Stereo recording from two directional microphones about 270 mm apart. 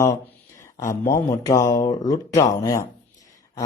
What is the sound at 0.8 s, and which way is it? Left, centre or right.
A man's voice, centre.